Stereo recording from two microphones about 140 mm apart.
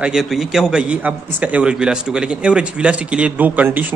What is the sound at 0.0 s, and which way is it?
A man's voice, 5° right (ahead or behind).